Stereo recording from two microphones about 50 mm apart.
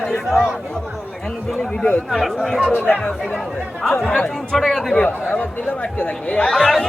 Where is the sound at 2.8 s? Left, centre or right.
Left.